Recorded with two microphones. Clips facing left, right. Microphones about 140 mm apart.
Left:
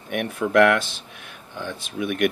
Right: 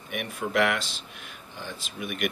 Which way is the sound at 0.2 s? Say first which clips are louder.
Left 8 dB; 55° left (ahead or behind).